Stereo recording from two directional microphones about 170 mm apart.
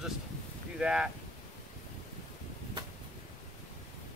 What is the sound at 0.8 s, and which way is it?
Speech, 5° right (ahead or behind).